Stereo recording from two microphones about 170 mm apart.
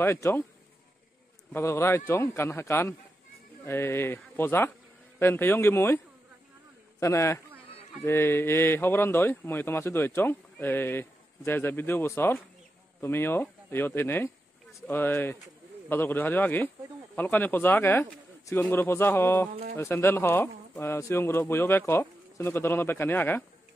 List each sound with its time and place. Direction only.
0.0 s speech: 15° left (ahead or behind)
1.5 s speech: 15° left (ahead or behind)
7.0 s speech: 15° left (ahead or behind)